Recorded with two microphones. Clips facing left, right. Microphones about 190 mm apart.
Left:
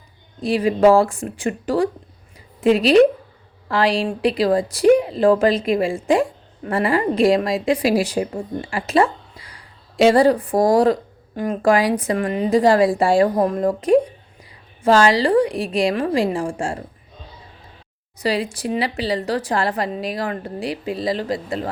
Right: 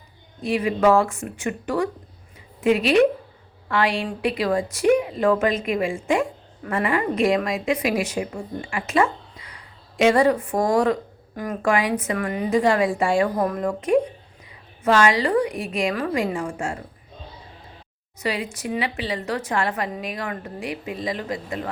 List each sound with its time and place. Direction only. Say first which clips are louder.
0.4 s a woman's voice: left 4 dB; 35° left (ahead or behind)
18.2 s a woman's voice: left 5 dB; 35° left (ahead or behind)